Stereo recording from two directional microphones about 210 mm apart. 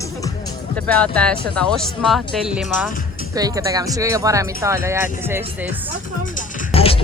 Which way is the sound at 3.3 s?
15° right (ahead or behind).